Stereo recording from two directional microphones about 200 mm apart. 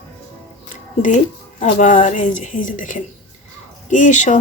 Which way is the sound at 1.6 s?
40° left (ahead or behind).